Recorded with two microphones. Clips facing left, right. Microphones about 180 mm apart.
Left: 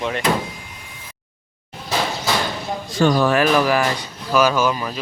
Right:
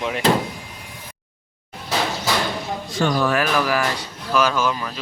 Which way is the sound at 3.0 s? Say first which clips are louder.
Left 4 dB; 30° left (ahead or behind).